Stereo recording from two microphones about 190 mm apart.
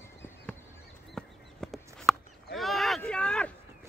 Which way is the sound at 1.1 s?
Centre (ahead or behind).